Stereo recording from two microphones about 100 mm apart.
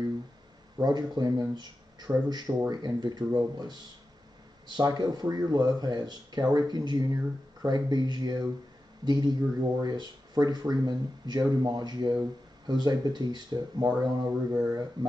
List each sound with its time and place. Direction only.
0.7 s speech: 45° right (ahead or behind)
14.5 s a sound: 30° right (ahead or behind)
15.0 s speech: 45° right (ahead or behind)